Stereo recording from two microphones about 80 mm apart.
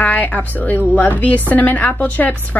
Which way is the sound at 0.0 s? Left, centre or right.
Left.